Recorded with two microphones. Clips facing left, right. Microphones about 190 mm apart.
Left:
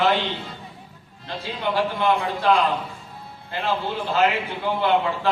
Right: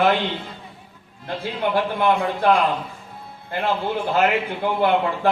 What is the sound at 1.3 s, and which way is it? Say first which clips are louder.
A man's voice: right 3 dB; 55° right (ahead or behind).